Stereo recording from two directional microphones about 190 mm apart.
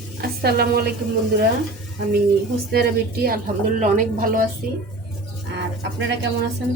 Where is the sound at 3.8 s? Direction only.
40° right (ahead or behind).